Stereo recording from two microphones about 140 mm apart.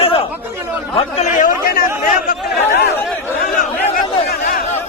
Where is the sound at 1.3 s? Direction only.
80° left.